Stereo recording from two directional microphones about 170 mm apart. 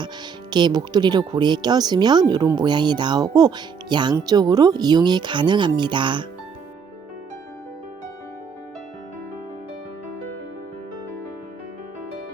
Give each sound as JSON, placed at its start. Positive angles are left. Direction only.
{"t": 0.5, "sound": "speech", "side_deg": -25}